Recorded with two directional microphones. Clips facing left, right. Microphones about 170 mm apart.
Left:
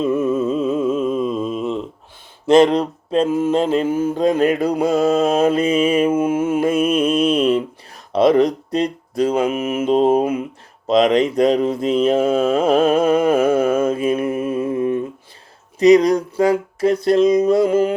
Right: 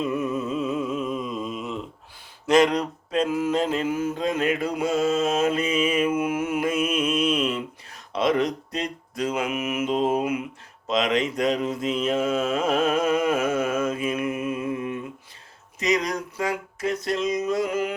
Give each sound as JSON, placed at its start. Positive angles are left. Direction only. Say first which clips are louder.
{"t": 0.3, "sound": "mantra", "louder": "left 8 dB", "side_deg": 30}